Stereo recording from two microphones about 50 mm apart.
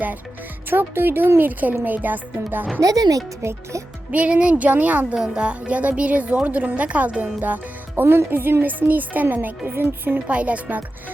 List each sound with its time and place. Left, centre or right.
0.7 s speech: right
1.4 s speech: right
3.4 s speech: right
4.1 s speech: right
5.1 s speech: centre; by 8.0 s right
8.0 s speech: right
10.2 s speech: right